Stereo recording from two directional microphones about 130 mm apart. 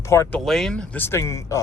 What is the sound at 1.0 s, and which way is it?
Speech, 20° left (ahead or behind).